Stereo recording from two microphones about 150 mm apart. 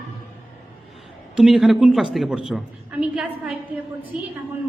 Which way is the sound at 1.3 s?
5° right (ahead or behind).